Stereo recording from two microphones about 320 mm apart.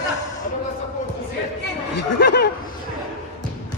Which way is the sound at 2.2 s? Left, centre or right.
Left.